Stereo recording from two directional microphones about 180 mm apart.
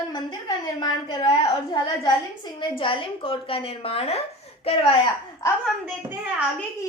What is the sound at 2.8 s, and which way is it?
A woman's voice, 30° left (ahead or behind).